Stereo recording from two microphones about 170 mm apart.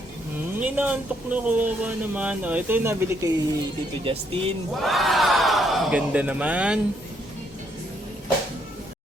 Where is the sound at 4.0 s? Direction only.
35° right (ahead or behind).